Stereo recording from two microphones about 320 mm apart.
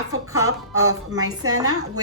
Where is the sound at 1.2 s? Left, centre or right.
Right.